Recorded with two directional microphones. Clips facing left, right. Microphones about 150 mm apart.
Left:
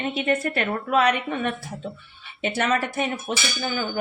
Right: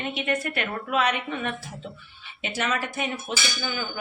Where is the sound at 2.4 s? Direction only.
55° left (ahead or behind).